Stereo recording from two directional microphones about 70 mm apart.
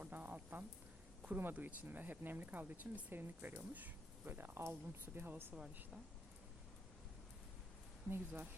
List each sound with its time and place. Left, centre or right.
0.0 s a sound: right
1.4 s speech: right
8.1 s speech: right